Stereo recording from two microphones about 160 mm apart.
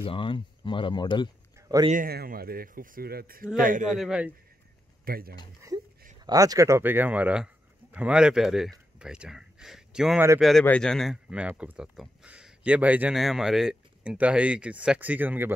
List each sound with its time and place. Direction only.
0.0 s speech: 30° left (ahead or behind)
1.6 s a sound: 20° right (ahead or behind)
2.0 s speech: 70° right (ahead or behind)
3.5 s a man's voice: 60° right (ahead or behind)
3.9 s a man's voice: 5° right (ahead or behind)
5.0 s speech: 70° right (ahead or behind)
6.2 s speech: 20° right (ahead or behind)